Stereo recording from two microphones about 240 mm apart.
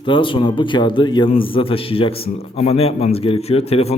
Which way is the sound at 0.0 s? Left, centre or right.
Left.